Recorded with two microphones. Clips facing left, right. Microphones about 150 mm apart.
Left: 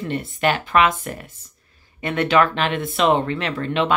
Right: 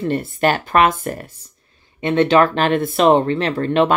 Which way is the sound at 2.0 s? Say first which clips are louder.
Right 4 dB; 25° right (ahead or behind).